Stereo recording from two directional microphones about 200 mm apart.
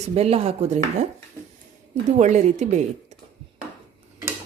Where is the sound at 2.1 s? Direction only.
35° right (ahead or behind).